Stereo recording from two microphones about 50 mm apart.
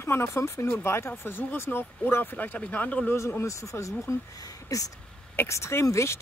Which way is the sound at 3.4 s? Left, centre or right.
Left.